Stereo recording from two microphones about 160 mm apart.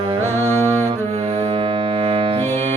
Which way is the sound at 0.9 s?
35° right (ahead or behind).